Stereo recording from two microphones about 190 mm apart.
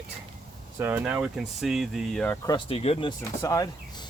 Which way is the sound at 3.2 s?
15° left (ahead or behind).